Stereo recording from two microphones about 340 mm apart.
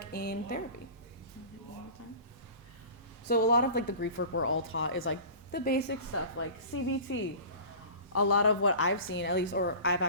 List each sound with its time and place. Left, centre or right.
0.0 s speech: left
3.2 s a woman's voice: left